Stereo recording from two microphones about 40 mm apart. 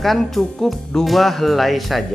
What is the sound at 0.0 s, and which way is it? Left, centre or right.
Speech, centre.